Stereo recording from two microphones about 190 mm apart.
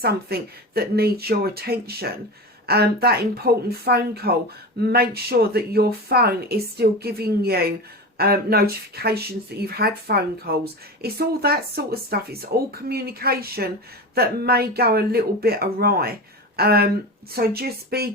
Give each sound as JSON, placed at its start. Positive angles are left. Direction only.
{"t": 0.0, "sound": "speech", "side_deg": -55}